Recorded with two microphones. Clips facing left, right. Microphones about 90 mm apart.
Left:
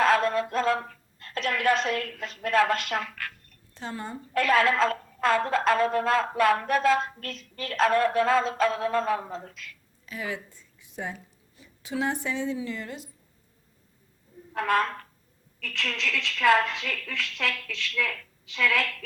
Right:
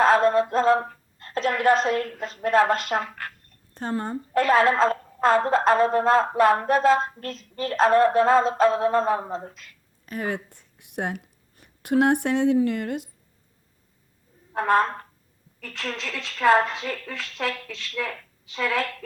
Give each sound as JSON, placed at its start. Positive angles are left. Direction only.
{"t": 0.0, "sound": "speech", "side_deg": -35}
{"t": 3.8, "sound": "a woman's voice", "side_deg": -45}
{"t": 10.1, "sound": "speech", "side_deg": -50}
{"t": 14.5, "sound": "a woman's voice", "side_deg": -30}